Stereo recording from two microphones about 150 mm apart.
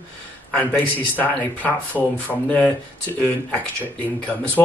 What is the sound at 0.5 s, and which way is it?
Speech, 10° left (ahead or behind).